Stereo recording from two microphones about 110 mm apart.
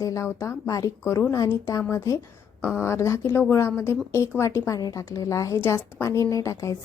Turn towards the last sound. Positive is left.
turn(degrees=30)  # may be behind; listen again after turning